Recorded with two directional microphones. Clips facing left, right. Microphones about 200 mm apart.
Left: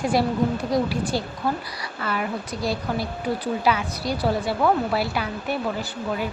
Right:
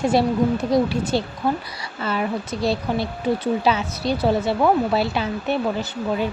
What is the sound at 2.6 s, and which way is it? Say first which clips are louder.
Speech: right 4 dB; 25° right (ahead or behind).